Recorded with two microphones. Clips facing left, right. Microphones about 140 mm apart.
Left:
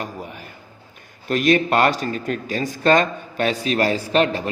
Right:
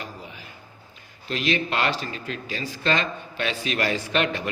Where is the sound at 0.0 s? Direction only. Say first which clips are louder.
Left 7 dB; 55° left (ahead or behind).